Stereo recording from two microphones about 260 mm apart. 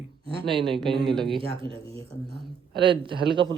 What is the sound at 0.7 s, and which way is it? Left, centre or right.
Speech, centre.